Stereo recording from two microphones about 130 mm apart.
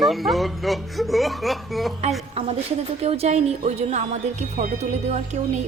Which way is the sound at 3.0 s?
55° right (ahead or behind).